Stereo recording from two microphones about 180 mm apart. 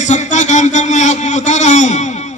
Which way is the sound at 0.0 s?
40° left (ahead or behind).